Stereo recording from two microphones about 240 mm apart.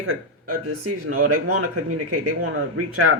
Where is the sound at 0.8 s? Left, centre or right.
Right.